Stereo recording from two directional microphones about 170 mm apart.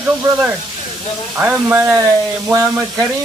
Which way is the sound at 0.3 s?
10° right (ahead or behind).